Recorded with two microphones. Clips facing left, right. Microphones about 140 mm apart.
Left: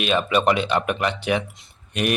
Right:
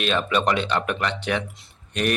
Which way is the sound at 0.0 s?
10° left (ahead or behind).